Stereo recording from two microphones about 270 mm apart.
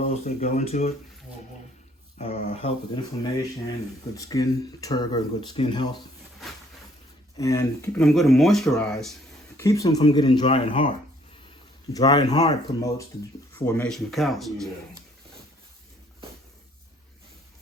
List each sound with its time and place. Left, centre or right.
0.1 s speech: left
2.1 s speech: left
4.2 s speech: centre
7.3 s speech: centre
9.6 s speech: centre
11.9 s speech: centre